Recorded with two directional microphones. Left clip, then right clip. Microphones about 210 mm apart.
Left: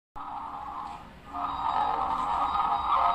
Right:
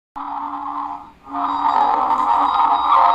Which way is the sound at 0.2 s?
35° right (ahead or behind).